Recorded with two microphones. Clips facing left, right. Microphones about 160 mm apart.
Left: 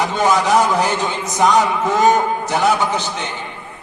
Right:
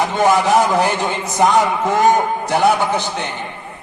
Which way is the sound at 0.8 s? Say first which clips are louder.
Right 1 dB; 15° right (ahead or behind).